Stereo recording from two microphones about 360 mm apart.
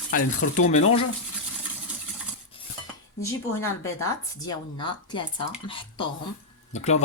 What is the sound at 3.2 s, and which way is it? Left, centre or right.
Speech, centre.